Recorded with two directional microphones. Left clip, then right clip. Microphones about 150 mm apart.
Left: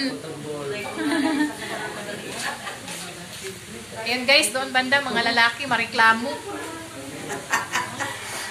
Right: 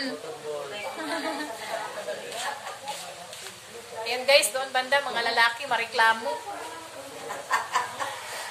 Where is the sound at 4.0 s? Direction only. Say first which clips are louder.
Left 2 dB; 15° left (ahead or behind).